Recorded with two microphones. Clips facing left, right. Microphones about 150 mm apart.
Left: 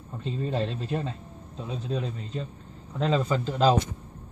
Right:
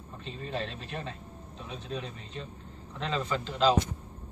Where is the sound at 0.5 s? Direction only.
35° left (ahead or behind).